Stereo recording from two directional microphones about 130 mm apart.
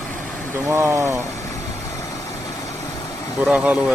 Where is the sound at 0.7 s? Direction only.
20° right (ahead or behind).